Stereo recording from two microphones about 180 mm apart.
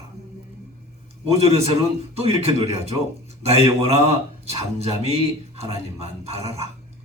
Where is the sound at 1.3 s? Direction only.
35° right (ahead or behind).